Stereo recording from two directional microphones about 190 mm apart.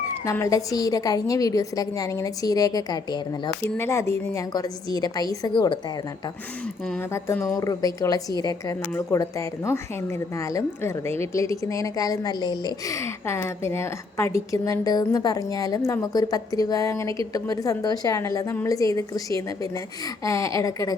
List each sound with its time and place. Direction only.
0.3 s a woman's voice: 15° left (ahead or behind)
7.1 s a woman's voice: 15° left (ahead or behind)
20.2 s a woman's voice: 15° left (ahead or behind)